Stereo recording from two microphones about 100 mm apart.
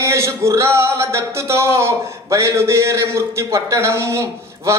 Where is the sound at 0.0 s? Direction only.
30° right (ahead or behind).